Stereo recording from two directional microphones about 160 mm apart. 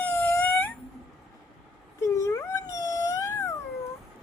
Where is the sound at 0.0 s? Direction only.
10° left (ahead or behind).